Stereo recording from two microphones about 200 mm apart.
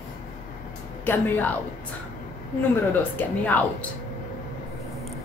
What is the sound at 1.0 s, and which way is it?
Speech, 10° left (ahead or behind).